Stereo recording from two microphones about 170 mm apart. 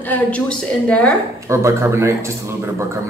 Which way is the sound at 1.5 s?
15° right (ahead or behind).